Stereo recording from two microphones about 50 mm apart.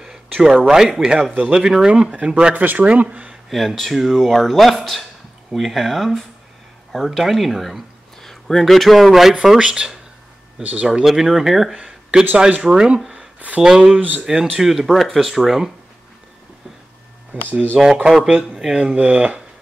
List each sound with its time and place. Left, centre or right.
0.0 s a sound: centre
0.7 s speech: centre
2.5 s speech: right
3.4 s speech: centre
9.6 s speech: centre
11.1 s speech: centre
13.0 s a sound: centre
13.6 s speech: centre
17.3 s speech: right
18.1 s speech: centre
18.9 s speech: right